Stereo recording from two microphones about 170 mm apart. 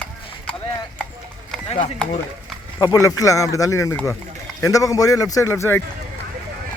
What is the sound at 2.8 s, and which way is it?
Speech, 20° left (ahead or behind).